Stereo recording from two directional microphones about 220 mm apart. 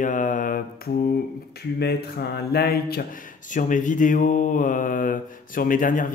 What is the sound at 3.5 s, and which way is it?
Speech, 35° left (ahead or behind).